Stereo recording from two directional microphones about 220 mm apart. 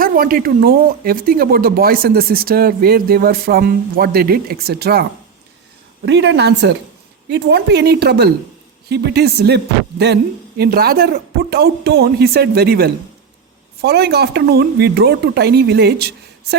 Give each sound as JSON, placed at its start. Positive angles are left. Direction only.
{"t": 0.0, "sound": "speech", "side_deg": -40}
{"t": 6.1, "sound": "speech", "side_deg": -50}